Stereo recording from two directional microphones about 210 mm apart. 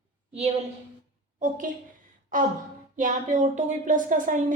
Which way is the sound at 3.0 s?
35° right (ahead or behind).